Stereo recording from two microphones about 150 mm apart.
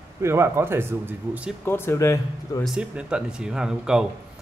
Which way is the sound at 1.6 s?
15° left (ahead or behind).